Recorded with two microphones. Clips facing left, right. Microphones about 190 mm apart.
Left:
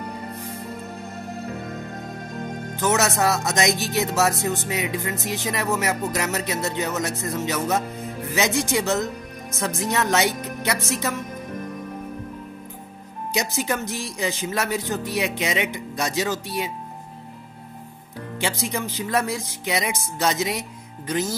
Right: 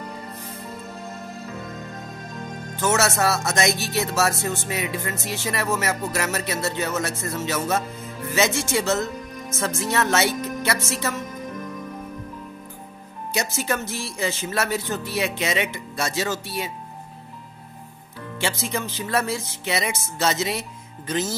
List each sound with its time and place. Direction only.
1.4 s music: 55° left (ahead or behind)
2.7 s music: 15° left (ahead or behind)
8.3 s speech: 15° left (ahead or behind)
10.9 s music: 15° left (ahead or behind)
13.3 s music: 15° left (ahead or behind)
18.4 s music: 15° left (ahead or behind)